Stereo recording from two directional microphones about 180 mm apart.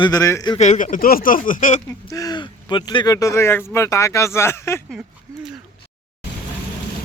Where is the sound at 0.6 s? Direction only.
40° left (ahead or behind).